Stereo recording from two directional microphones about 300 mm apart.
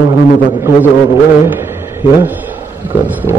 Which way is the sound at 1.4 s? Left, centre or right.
Centre.